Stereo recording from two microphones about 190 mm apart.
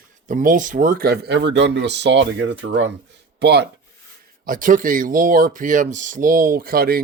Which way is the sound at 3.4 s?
60° right (ahead or behind).